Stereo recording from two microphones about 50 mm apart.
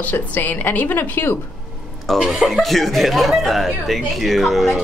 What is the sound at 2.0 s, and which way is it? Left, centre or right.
Speech, centre.